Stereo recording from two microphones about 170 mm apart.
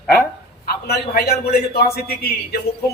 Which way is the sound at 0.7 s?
70° left (ahead or behind).